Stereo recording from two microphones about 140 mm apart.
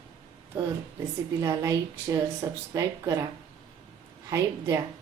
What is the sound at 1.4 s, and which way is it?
Speech, 20° right (ahead or behind).